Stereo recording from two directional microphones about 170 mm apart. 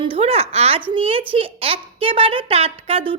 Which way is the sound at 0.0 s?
35° right (ahead or behind).